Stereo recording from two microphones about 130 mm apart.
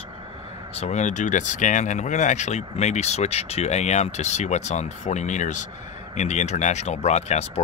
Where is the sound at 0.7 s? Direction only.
60° left (ahead or behind).